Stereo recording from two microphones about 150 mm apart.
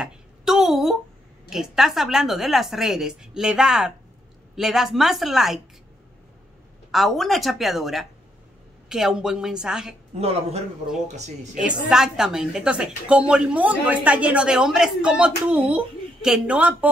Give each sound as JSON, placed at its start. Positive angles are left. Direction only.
{"t": 0.0, "sound": "a sound", "side_deg": -5}
{"t": 1.5, "sound": "a woman's voice", "side_deg": 0}
{"t": 6.9, "sound": "a woman's voice", "side_deg": 0}
{"t": 10.1, "sound": "speech", "side_deg": -45}
{"t": 11.6, "sound": "a woman's voice", "side_deg": -5}